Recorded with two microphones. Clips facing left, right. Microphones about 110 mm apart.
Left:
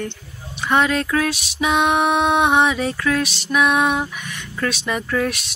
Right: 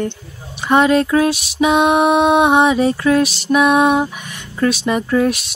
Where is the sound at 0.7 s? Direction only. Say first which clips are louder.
Right 6 dB; 25° right (ahead or behind).